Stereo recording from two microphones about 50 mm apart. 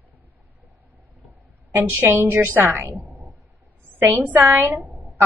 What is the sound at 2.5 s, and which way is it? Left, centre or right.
Speech, right.